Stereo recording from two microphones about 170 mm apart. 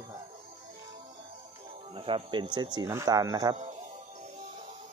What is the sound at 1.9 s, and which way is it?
Speech, 30° right (ahead or behind).